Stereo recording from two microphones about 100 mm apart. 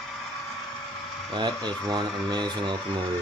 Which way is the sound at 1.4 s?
45° right (ahead or behind).